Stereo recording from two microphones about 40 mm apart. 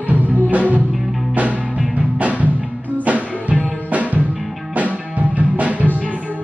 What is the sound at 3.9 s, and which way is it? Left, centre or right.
Music, right.